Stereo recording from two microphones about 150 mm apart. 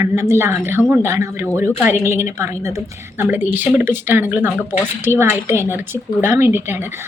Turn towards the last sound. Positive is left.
turn(degrees=-15)  # may be behind; listen again after turning